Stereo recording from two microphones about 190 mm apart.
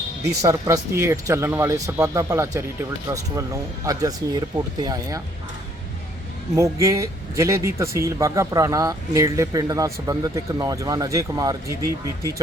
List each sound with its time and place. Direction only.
0.4 s speech: 15° right (ahead or behind)
6.6 s speech: 15° right (ahead or behind)